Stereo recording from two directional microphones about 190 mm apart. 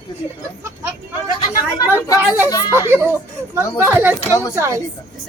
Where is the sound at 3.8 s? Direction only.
10° right (ahead or behind).